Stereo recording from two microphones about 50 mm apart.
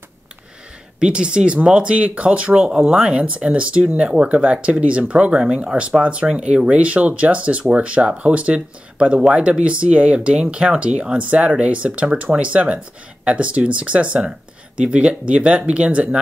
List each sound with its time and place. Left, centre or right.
0.9 s speech: centre